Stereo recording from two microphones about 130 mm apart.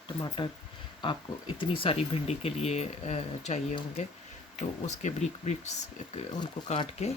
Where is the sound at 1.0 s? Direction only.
40° left (ahead or behind); by 3.8 s 60° left (ahead or behind).